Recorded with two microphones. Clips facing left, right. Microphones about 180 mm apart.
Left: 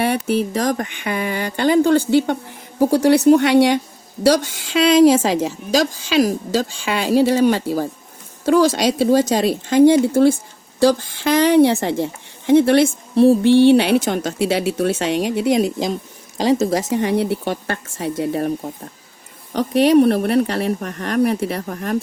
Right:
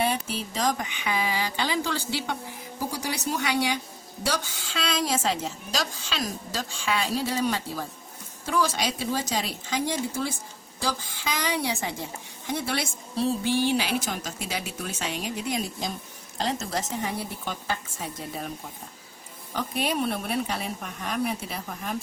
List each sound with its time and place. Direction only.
0.0 s a woman's voice: 65° left (ahead or behind); by 16.0 s 90° left
16.4 s a woman's voice: 80° left